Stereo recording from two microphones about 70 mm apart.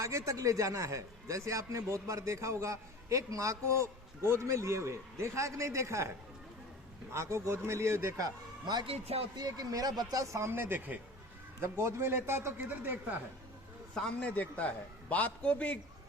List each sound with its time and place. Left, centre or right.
0.0 s a man's voice: right
7.1 s speech: right
9.3 s speech: right
10.3 s speech: right
11.6 s speech: right
12.5 s speech: right
14.2 s a man's voice: centre